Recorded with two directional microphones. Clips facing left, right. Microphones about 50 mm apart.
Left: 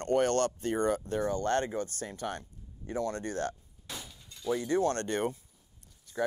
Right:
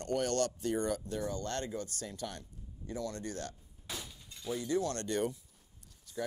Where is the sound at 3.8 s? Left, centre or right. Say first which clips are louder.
Even; centre.